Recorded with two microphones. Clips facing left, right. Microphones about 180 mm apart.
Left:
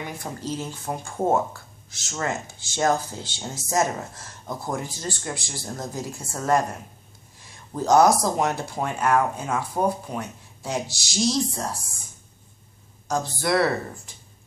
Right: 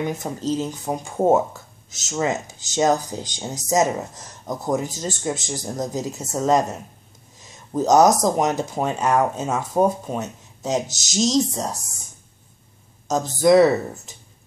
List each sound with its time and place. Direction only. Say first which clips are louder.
0.0 s speech: right 7 dB; 20° right (ahead or behind)
13.4 s speech: right 10 dB; 20° right (ahead or behind)